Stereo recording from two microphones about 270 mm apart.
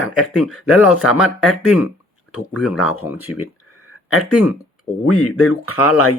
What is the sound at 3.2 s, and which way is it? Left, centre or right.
Speech, left.